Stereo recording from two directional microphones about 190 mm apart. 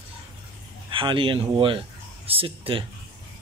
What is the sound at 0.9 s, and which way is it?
Speech, 25° right (ahead or behind).